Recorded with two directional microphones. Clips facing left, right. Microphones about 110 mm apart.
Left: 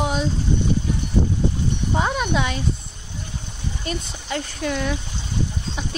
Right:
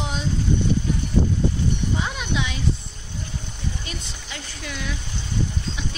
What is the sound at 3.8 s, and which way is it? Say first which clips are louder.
Speech: left 7 dB; 45° left (ahead or behind).